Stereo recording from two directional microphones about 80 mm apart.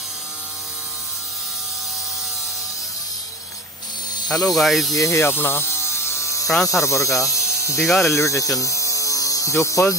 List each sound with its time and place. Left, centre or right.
4.3 s speech: centre
4.9 s a sound: left
6.4 s speech: centre
6.8 s speech: left